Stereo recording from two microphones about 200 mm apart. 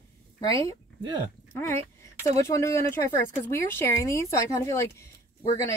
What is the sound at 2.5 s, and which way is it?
A woman's voice, 15° left (ahead or behind).